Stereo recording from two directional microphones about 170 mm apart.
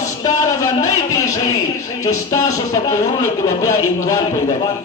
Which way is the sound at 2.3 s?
15° left (ahead or behind).